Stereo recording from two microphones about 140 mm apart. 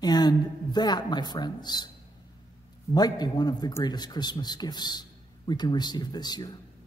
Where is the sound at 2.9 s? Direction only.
30° left (ahead or behind).